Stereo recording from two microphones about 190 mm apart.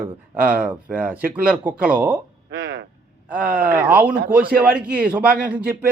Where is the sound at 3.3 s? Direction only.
5° right (ahead or behind).